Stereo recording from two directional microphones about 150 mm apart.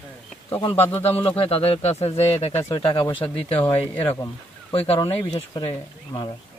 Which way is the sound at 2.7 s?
30° left (ahead or behind).